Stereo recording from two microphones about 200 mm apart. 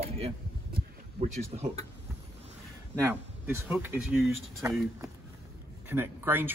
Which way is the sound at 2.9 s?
10° right (ahead or behind).